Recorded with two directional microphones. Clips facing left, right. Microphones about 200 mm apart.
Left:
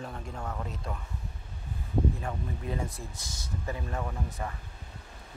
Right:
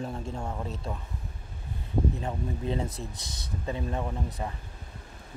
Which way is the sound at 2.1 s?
25° right (ahead or behind).